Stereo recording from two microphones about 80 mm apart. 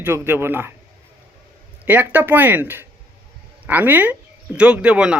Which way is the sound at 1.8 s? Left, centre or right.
Right.